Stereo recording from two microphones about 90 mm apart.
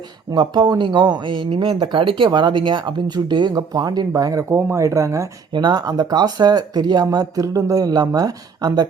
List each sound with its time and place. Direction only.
0.3 s speech: 60° right (ahead or behind); by 4.4 s 40° right (ahead or behind)
4.4 s speech: 30° right (ahead or behind)
5.5 s speech: 50° right (ahead or behind)